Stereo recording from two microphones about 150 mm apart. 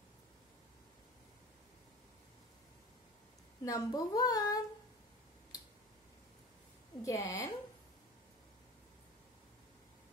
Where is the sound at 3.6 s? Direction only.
25° left (ahead or behind).